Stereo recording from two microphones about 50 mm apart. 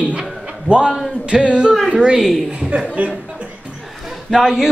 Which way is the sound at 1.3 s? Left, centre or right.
Centre.